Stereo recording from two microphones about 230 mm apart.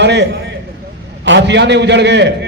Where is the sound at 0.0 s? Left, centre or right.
Right.